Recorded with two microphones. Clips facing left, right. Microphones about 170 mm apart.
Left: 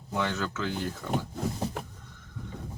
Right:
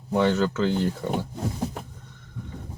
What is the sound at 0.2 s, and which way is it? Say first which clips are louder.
Speech: right 9 dB; 30° right (ahead or behind).